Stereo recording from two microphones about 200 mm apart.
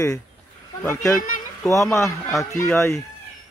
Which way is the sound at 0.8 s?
15° left (ahead or behind).